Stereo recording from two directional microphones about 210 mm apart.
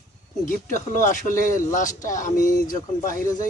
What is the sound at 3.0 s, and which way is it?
Speech, 15° left (ahead or behind).